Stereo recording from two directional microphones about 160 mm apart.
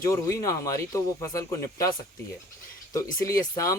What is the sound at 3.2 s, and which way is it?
Speech, 20° left (ahead or behind).